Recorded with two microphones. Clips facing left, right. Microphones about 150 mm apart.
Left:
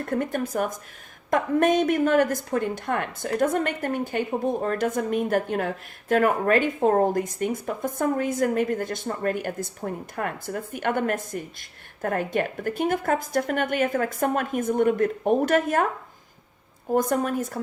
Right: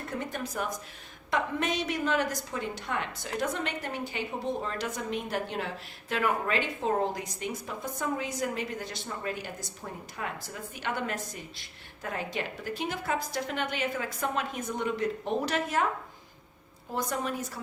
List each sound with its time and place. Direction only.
0.0 s a woman's voice: 50° left (ahead or behind)
16.9 s a woman's voice: 50° left (ahead or behind)